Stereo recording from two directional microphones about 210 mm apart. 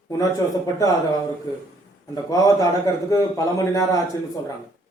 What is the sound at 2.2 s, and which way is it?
A man's voice, 15° left (ahead or behind).